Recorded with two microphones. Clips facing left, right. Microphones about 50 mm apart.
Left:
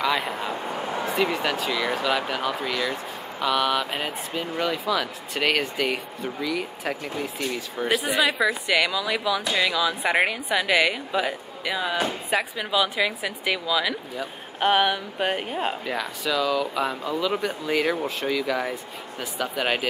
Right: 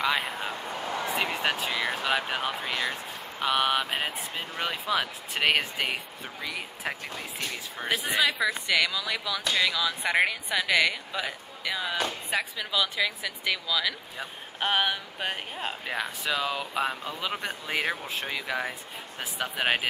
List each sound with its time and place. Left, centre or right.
0.0 s speech: centre
1.4 s speech: right
8.2 s a woman's voice: centre
16.0 s speech: right